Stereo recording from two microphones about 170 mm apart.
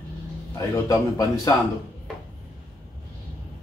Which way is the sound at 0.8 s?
20° left (ahead or behind).